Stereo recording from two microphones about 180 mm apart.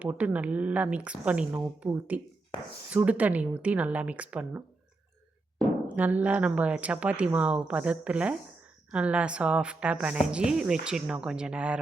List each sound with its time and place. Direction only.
0.0 s speech: 10° right (ahead or behind)
5.9 s a woman's voice: 10° right (ahead or behind)